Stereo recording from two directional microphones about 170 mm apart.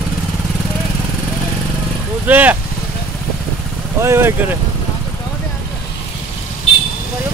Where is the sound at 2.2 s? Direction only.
10° right (ahead or behind).